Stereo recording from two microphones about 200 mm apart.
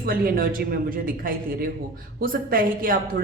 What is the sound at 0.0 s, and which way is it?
A woman's voice, 45° right (ahead or behind).